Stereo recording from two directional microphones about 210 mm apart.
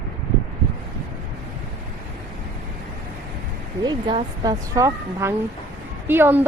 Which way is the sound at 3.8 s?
20° right (ahead or behind).